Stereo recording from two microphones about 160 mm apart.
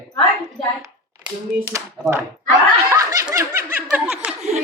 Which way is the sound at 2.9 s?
20° right (ahead or behind).